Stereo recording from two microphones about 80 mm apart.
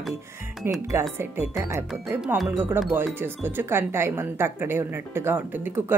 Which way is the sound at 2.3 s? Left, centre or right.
Right.